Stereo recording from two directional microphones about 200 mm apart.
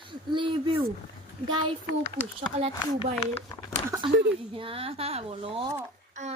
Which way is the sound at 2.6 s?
30° right (ahead or behind).